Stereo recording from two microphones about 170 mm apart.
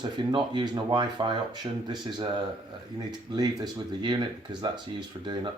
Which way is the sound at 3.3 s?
25° right (ahead or behind).